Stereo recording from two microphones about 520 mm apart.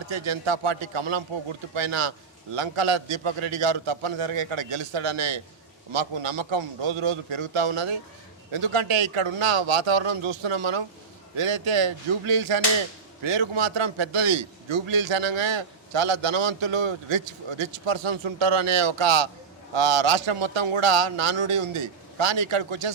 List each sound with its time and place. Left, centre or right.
0.1 s a man's voice: right
5.9 s a man's voice: right
13.2 s a man's voice: right